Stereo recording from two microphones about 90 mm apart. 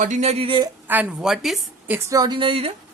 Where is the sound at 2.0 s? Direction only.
45° right (ahead or behind).